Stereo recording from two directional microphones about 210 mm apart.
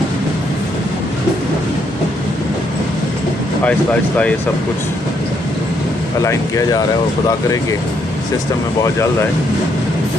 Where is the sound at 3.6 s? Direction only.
5° left (ahead or behind).